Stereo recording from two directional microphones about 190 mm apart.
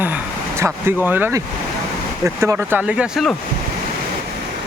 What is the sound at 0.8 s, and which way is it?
Speech, 10° right (ahead or behind).